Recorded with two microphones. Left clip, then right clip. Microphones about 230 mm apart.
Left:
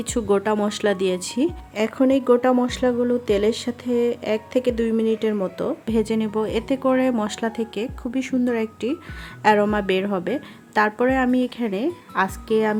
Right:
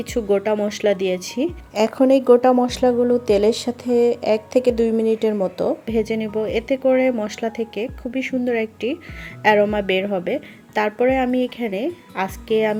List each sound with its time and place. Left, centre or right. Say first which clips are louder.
0.0 s speech: right 1 dB; centre
1.7 s speech: right 5 dB; centre
5.8 s a woman's voice: right 1 dB; centre